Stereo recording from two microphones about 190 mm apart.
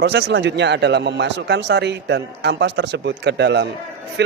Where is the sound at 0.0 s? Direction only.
65° right (ahead or behind).